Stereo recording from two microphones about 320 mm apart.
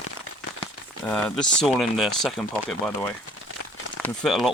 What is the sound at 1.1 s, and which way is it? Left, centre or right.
Speech, centre.